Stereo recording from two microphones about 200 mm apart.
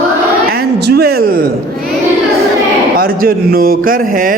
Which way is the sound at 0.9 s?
50° right (ahead or behind).